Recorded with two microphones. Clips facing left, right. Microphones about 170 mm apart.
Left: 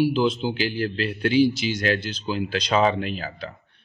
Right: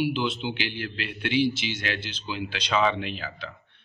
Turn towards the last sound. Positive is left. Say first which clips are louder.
# left 4 dB
turn(degrees=40)  # may be behind; listen again after turning